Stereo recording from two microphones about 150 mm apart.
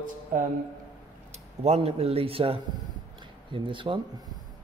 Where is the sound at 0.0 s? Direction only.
65° right (ahead or behind).